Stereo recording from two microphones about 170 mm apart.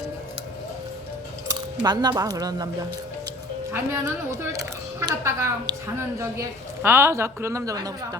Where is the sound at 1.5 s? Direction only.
25° right (ahead or behind).